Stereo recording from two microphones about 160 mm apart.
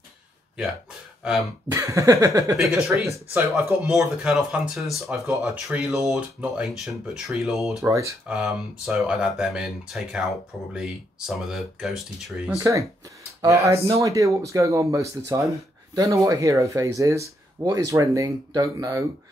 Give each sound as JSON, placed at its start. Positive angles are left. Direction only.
{"t": 1.7, "sound": "speech", "side_deg": -20}
{"t": 2.5, "sound": "speech", "side_deg": 0}
{"t": 3.1, "sound": "speech", "side_deg": -15}
{"t": 3.8, "sound": "speech", "side_deg": 0}
{"t": 7.8, "sound": "speech", "side_deg": -20}
{"t": 8.3, "sound": "speech", "side_deg": -5}
{"t": 12.5, "sound": "speech", "side_deg": -20}